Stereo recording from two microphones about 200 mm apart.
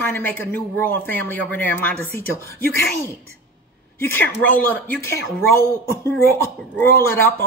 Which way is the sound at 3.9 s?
10° left (ahead or behind).